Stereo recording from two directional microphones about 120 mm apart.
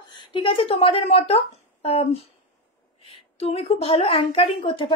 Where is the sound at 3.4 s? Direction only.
55° left (ahead or behind).